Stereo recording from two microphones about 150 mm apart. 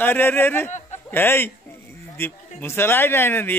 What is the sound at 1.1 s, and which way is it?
A man's voice, 15° left (ahead or behind).